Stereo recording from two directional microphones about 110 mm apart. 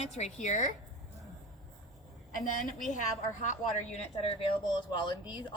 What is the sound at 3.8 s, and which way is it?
Speech, 85° left.